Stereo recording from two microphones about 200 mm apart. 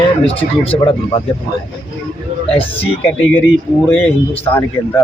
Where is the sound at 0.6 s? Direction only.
25° left (ahead or behind).